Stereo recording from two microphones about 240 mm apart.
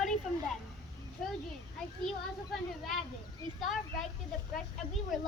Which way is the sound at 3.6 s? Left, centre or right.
Centre.